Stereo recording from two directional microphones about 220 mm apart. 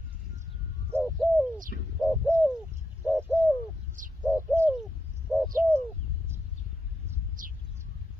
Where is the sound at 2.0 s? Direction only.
5° right (ahead or behind).